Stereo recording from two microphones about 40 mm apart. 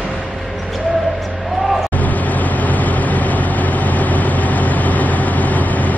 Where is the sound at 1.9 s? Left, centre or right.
Left.